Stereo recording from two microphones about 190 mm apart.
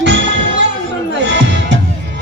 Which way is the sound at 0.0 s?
75° right (ahead or behind).